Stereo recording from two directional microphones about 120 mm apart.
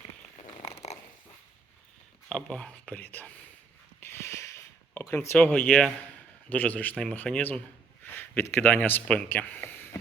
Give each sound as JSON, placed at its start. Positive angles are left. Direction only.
{"t": 2.3, "sound": "speech", "side_deg": 5}
{"t": 4.0, "sound": "a sound", "side_deg": 20}
{"t": 5.1, "sound": "speech", "side_deg": 15}